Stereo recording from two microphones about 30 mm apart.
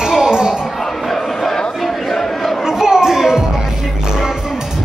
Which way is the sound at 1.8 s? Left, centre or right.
Centre.